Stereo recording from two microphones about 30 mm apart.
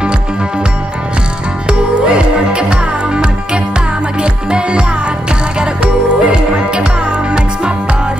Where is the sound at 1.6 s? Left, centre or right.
Right.